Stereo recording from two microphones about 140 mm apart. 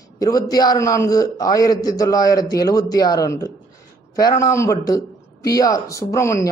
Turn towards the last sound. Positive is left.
turn(degrees=20)  # may be behind; listen again after turning